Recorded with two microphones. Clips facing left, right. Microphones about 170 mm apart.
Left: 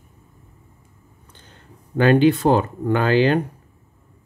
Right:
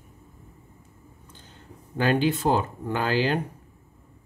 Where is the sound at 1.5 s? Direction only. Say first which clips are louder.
Left 7 dB; 65° left (ahead or behind).